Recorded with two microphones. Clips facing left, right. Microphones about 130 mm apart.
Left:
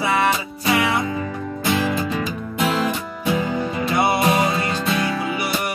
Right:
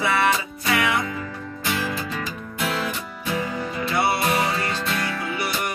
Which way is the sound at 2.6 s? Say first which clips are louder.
Left 5 dB; 35° left (ahead or behind).